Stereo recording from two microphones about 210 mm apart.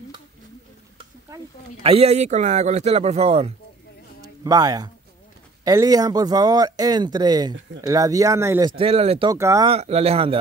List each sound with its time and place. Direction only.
1.8 s speech: 30° right (ahead or behind)
4.4 s speech: 15° right (ahead or behind)
9.3 s speech: 15° right (ahead or behind)
9.7 s speech: 30° right (ahead or behind)